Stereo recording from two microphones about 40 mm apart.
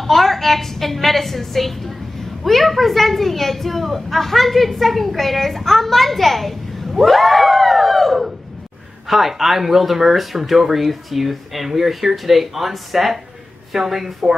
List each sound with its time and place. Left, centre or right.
0.0 s speech: centre
6.9 s a sound: centre
9.0 s speech: centre